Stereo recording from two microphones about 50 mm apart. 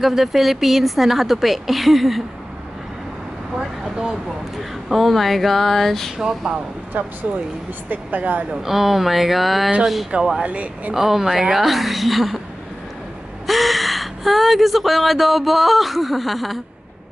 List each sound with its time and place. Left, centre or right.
0.0 s a woman's voice: centre
3.8 s vehicle: centre
4.6 s a woman's voice: centre
6.1 s speech: centre
6.9 s speech: right
8.6 s a woman's voice: centre
10.4 s speech: right
11.0 s a woman's voice: centre
13.5 s speech: centre